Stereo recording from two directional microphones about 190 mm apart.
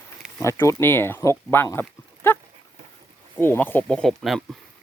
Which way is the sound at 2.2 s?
10° left (ahead or behind).